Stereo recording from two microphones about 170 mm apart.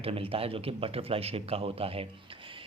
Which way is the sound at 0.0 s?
35° right (ahead or behind).